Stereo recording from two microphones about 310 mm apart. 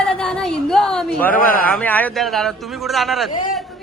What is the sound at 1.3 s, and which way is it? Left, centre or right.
Speech, left.